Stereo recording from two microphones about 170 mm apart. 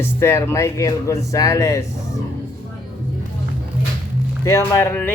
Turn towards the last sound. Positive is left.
turn(degrees=10)  # may be behind; listen again after turning